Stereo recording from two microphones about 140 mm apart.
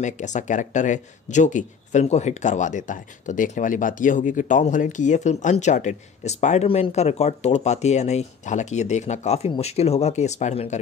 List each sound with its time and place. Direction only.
0.0 s speech: 60° left (ahead or behind)